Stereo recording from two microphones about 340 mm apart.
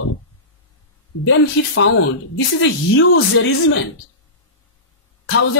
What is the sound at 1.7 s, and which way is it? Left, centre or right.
Speech, left.